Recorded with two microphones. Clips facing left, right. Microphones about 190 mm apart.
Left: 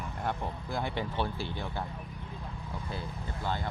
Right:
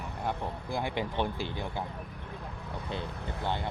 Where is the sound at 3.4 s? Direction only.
20° right (ahead or behind).